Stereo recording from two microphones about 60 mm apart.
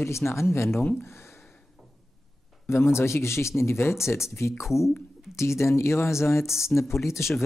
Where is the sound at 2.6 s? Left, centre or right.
Left.